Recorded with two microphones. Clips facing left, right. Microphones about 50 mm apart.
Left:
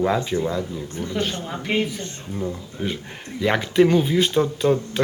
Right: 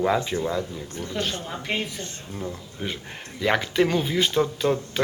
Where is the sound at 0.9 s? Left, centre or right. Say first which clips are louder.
Left 3 dB; centre.